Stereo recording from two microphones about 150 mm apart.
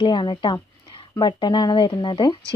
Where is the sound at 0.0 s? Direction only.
30° left (ahead or behind).